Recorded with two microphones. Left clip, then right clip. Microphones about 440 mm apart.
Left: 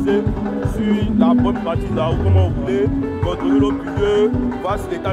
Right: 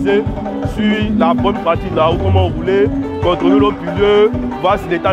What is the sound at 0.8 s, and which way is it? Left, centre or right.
Speech, right.